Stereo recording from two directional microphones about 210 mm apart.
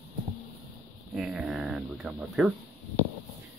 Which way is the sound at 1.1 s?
Centre (ahead or behind).